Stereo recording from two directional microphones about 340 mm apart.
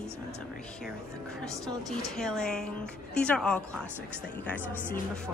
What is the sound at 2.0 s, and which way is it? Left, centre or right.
A woman's voice, centre.